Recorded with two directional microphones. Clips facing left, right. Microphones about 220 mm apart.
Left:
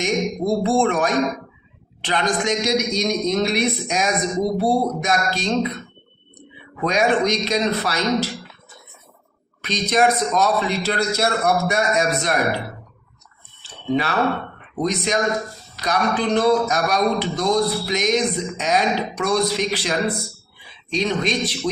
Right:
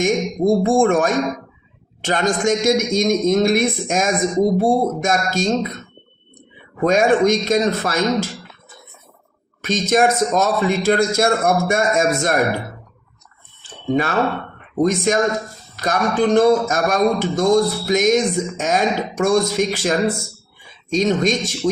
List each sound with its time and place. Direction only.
0.0 s speech: 50° right (ahead or behind)
6.7 s speech: 45° right (ahead or behind)
9.6 s speech: 45° right (ahead or behind)
13.6 s a sound: 50° right (ahead or behind)
14.8 s speech: 50° right (ahead or behind)